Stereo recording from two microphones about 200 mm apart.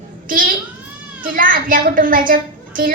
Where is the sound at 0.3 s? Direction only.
45° right (ahead or behind).